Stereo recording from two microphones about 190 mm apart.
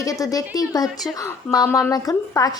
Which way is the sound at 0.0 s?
20° left (ahead or behind).